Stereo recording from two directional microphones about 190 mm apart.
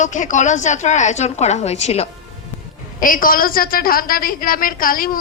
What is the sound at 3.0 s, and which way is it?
A woman's voice, 45° left (ahead or behind).